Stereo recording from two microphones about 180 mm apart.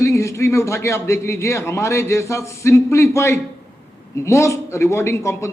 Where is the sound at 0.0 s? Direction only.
15° left (ahead or behind).